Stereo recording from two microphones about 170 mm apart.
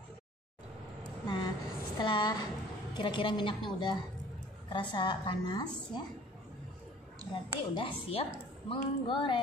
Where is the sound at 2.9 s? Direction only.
25° left (ahead or behind).